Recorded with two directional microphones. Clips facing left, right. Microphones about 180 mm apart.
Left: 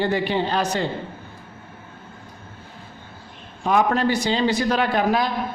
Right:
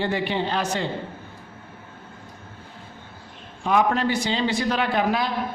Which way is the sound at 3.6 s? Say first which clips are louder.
Left 2 dB; 45° left (ahead or behind).